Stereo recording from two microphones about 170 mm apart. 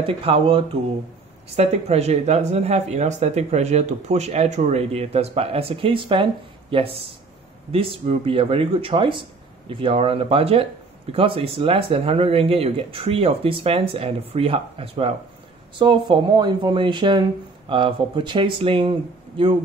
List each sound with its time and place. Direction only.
0.0 s speech: 35° right (ahead or behind)